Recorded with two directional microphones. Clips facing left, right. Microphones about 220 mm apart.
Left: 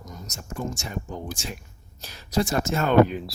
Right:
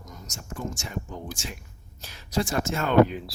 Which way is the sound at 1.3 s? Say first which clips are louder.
Left 3 dB; 40° left (ahead or behind).